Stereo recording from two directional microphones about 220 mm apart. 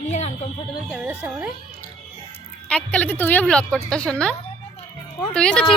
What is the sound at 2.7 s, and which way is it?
A woman's voice, 5° left (ahead or behind).